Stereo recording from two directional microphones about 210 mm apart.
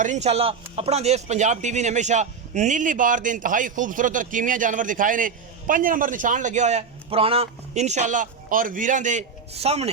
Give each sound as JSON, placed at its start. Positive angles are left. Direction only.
{"t": 0.0, "sound": "speech", "side_deg": -35}